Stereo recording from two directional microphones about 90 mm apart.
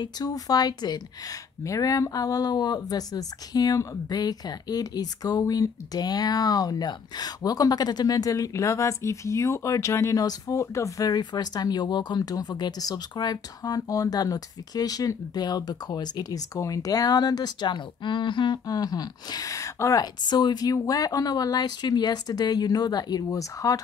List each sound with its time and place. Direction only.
0.0 s speech: 45° left (ahead or behind)
1.6 s speech: 40° left (ahead or behind); by 18.6 s 60° left (ahead or behind)
18.7 s speech: 45° left (ahead or behind)
20.2 s speech: 50° left (ahead or behind)